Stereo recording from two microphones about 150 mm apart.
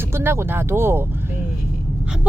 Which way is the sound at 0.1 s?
15° right (ahead or behind).